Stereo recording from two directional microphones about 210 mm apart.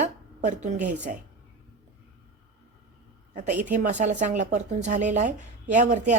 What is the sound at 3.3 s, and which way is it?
A woman's voice, 35° right (ahead or behind).